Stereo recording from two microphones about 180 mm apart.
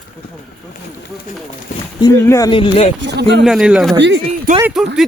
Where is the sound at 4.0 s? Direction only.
80° right.